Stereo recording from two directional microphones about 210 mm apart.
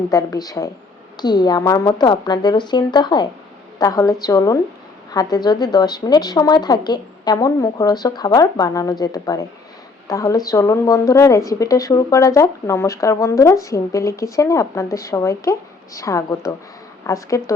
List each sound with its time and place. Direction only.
0.1 s a woman's voice: 15° left (ahead or behind)